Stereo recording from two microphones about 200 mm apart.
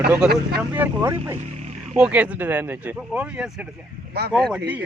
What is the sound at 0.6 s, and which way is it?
Speech, 10° right (ahead or behind).